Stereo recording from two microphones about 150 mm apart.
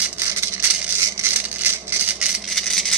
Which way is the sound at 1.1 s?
15° right (ahead or behind).